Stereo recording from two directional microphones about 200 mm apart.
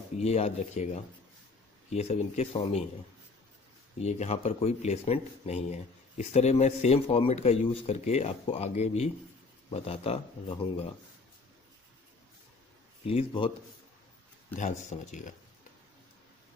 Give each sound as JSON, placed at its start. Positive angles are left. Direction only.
{"t": 0.2, "sound": "speech", "side_deg": 30}
{"t": 1.9, "sound": "speech", "side_deg": 35}
{"t": 4.0, "sound": "speech", "side_deg": 35}
{"t": 13.0, "sound": "speech", "side_deg": 30}
{"t": 14.5, "sound": "speech", "side_deg": 35}